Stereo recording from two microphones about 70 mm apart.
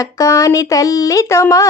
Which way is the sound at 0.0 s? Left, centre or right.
Left.